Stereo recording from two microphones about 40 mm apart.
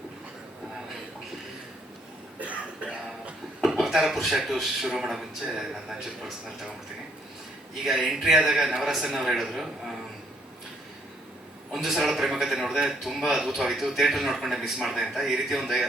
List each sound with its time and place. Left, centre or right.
2.4 s cough: right
3.6 s a man's voice: centre
7.9 s a man's voice: centre
11.7 s a man's voice: centre